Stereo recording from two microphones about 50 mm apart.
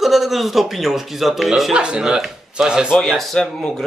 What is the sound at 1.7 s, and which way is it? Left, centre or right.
Speech, centre.